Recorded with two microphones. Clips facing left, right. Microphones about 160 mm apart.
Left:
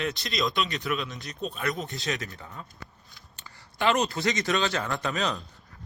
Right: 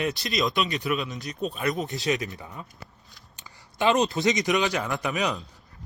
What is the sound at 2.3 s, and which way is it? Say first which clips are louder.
A man's voice: right 2 dB; 15° right (ahead or behind).